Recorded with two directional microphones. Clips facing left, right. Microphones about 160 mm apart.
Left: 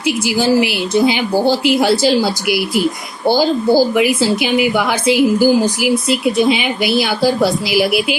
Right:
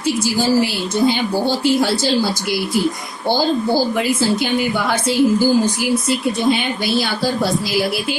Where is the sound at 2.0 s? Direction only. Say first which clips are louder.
Left 4 dB; 85° left.